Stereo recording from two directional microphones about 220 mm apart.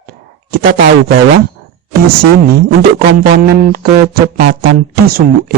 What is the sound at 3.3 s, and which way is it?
Speech, 45° right (ahead or behind).